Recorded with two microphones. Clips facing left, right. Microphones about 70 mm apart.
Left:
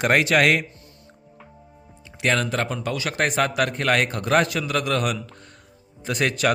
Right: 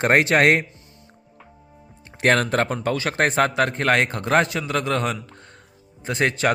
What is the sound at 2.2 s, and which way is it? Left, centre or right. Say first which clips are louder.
A man's voice: right 4 dB; right.